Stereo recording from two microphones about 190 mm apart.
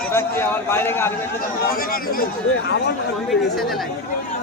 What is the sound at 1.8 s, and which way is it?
Speech, 50° left (ahead or behind).